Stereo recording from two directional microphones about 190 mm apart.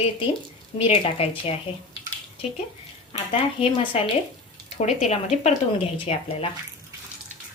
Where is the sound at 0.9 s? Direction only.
30° left (ahead or behind).